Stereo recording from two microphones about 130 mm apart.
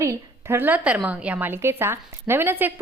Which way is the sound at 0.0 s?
20° right (ahead or behind).